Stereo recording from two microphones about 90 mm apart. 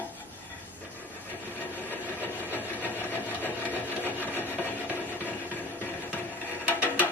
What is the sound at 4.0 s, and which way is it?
Rub, 20° left (ahead or behind).